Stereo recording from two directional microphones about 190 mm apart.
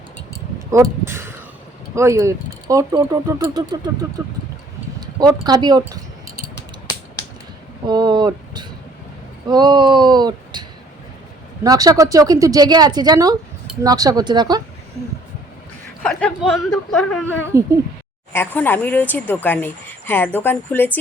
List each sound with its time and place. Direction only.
0.7 s speech: 15° right (ahead or behind)
7.9 s a sound: 25° right (ahead or behind)
9.5 s speech: 25° right (ahead or behind)
16.0 s speech: centre (ahead or behind)